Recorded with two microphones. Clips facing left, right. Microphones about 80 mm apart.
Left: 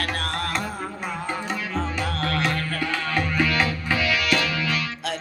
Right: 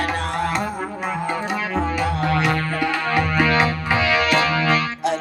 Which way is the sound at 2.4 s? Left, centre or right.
Right.